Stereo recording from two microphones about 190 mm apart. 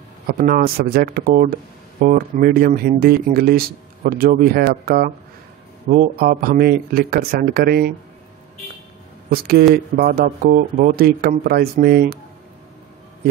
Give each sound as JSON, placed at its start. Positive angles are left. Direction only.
{"t": 0.3, "sound": "speech", "side_deg": -50}
{"t": 9.3, "sound": "speech", "side_deg": -55}